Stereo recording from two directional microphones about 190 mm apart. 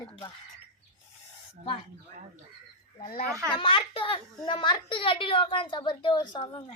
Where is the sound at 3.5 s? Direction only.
25° left (ahead or behind).